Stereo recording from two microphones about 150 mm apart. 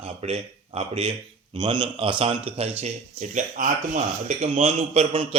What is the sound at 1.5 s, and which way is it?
A man's voice, 30° right (ahead or behind).